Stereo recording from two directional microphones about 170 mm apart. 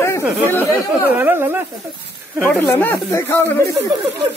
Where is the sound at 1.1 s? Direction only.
10° right (ahead or behind).